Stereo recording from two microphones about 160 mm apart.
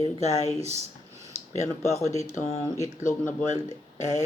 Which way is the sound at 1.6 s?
45° left (ahead or behind).